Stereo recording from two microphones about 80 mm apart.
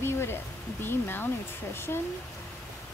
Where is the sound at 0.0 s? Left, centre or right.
Left.